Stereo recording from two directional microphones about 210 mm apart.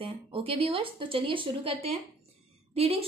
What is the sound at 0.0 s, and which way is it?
A woman's voice, 25° right (ahead or behind).